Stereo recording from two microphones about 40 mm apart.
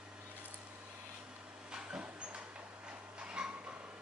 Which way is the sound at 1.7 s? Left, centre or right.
Right.